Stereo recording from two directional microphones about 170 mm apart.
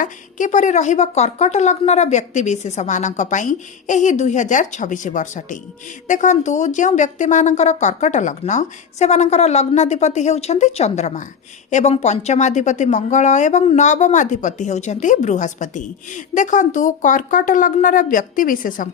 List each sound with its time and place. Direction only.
0.0 s speech: 50° left (ahead or behind)